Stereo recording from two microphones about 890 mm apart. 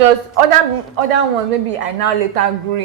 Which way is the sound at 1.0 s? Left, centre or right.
Right.